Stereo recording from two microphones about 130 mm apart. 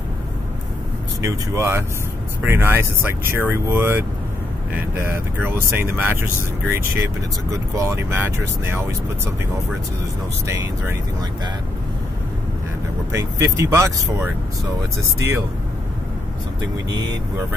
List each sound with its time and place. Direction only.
1.2 s speech: 20° right (ahead or behind)
7.7 s speech: 20° right (ahead or behind)
10.4 s speech: 20° right (ahead or behind)
13.1 s speech: 25° right (ahead or behind)